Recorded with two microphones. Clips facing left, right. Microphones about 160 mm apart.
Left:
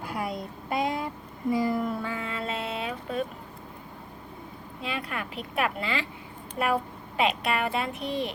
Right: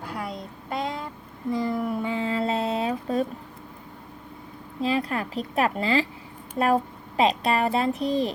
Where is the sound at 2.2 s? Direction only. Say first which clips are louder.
Right 7 dB; 35° right (ahead or behind).